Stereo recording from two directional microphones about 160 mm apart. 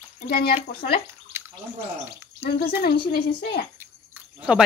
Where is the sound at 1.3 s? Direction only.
15° right (ahead or behind).